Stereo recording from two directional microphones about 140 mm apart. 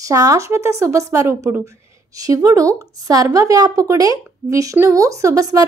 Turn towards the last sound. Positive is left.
turn(degrees=-25)  # may be behind; listen again after turning